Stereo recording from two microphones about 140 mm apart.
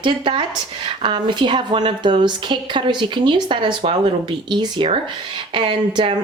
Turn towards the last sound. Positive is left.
turn(degrees=-35)  # may be behind; listen again after turning